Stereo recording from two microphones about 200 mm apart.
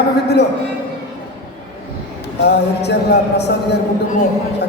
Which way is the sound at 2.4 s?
55° left (ahead or behind).